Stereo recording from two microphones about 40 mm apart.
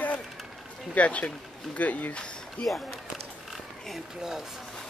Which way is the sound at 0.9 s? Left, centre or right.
Left.